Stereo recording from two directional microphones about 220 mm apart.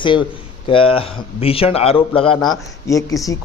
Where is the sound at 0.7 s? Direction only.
25° left (ahead or behind).